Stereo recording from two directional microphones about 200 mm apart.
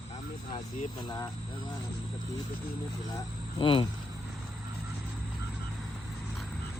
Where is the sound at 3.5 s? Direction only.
25° left (ahead or behind).